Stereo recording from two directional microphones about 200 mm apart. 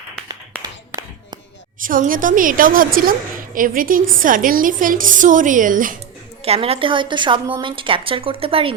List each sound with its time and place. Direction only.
0.6 s clapping: 15° right (ahead or behind)
1.8 s a woman's voice: 40° right (ahead or behind)
6.4 s speech: 30° right (ahead or behind)